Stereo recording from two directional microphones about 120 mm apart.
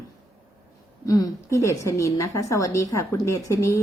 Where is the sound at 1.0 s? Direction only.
30° left (ahead or behind).